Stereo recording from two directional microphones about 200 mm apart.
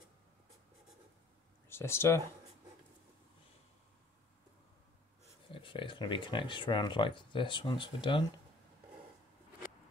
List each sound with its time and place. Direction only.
1.7 s speech: 10° left (ahead or behind)
5.5 s speech: 25° left (ahead or behind)